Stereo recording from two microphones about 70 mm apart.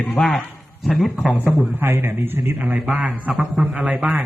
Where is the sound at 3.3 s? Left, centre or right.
Centre.